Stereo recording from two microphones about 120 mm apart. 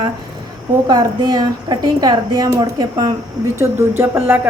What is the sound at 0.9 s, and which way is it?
A woman's voice, 35° right (ahead or behind).